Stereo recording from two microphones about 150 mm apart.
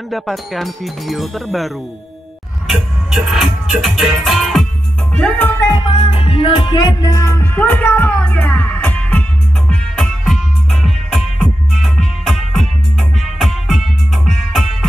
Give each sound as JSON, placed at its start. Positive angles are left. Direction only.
{"t": 0.1, "sound": "music", "side_deg": 0}
{"t": 2.7, "sound": "music", "side_deg": 0}
{"t": 5.6, "sound": "music", "side_deg": 25}
{"t": 5.9, "sound": "music", "side_deg": 35}